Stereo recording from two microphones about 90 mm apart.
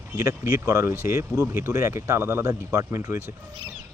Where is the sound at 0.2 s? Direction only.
30° right (ahead or behind).